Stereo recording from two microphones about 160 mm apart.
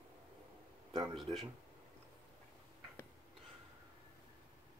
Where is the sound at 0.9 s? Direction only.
25° right (ahead or behind).